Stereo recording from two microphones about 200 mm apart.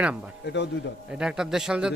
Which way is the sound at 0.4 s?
60° left (ahead or behind).